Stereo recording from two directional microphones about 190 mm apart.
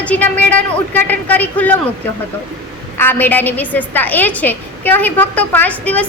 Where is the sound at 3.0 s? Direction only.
10° left (ahead or behind).